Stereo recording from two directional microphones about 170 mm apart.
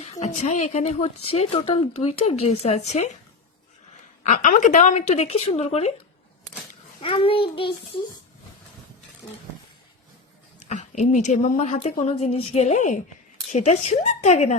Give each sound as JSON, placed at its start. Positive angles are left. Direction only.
{"t": 0.0, "sound": "speech", "side_deg": 40}
{"t": 4.2, "sound": "speech", "side_deg": 45}
{"t": 7.0, "sound": "speech", "side_deg": 30}
{"t": 10.7, "sound": "speech", "side_deg": 45}